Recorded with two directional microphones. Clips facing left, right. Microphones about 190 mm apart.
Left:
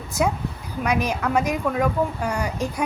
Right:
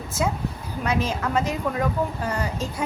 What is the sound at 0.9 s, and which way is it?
A woman's voice, 15° left (ahead or behind).